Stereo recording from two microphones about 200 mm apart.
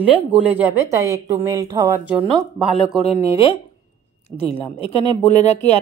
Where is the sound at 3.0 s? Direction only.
30° left (ahead or behind).